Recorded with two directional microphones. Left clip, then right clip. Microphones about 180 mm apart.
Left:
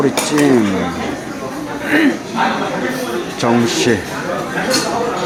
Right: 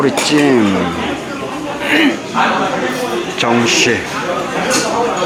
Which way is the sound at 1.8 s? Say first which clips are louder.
Right 2 dB; 40° left (ahead or behind).